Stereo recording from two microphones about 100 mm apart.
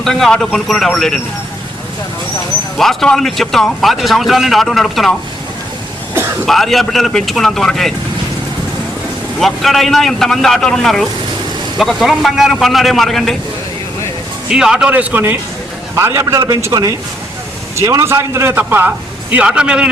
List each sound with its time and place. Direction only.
0.0 s a man's voice: 5° left (ahead or behind)
2.7 s a man's voice: 5° left (ahead or behind)
6.4 s a man's voice: centre (ahead or behind)
9.4 s a man's voice: centre (ahead or behind)
14.5 s a man's voice: 5° right (ahead or behind)